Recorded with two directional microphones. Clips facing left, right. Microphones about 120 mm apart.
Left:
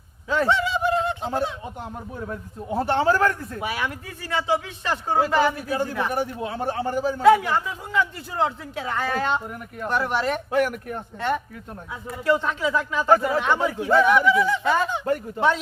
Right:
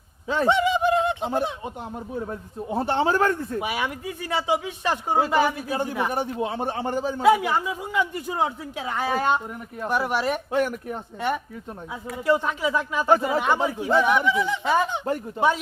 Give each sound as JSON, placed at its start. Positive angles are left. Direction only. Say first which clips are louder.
{"t": 0.3, "sound": "a sound", "louder": "right 1 dB", "side_deg": -20}
{"t": 2.3, "sound": "a man's voice", "louder": "left 4 dB", "side_deg": -25}
{"t": 7.2, "sound": "speech", "louder": "left 2 dB", "side_deg": -10}
{"t": 10.5, "sound": "speech", "louder": "left 1 dB", "side_deg": 60}
{"t": 12.2, "sound": "a man's voice", "louder": "even", "side_deg": -15}
{"t": 15.4, "sound": "speech", "louder": "right 1 dB", "side_deg": -10}